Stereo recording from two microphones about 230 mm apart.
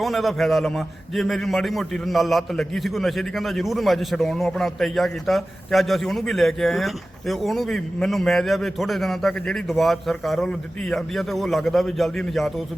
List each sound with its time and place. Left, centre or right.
0.0 s a man's voice: centre